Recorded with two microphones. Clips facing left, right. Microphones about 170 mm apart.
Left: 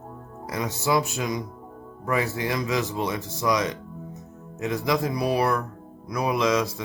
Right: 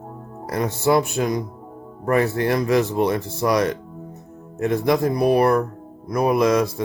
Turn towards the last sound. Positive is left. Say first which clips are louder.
# right 5 dB
turn(degrees=-55)  # may be behind; listen again after turning